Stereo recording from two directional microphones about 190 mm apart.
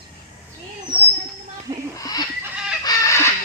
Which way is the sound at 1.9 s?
20° left (ahead or behind).